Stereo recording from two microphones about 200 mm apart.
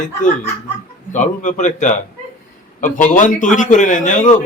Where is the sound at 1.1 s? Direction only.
40° left (ahead or behind).